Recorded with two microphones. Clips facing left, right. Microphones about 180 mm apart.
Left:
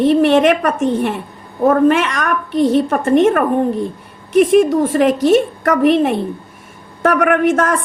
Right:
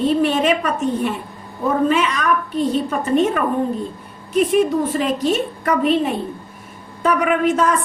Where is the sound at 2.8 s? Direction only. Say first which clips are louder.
Left 5 dB; 50° left (ahead or behind).